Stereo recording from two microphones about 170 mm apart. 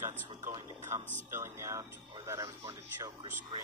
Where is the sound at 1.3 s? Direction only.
15° right (ahead or behind).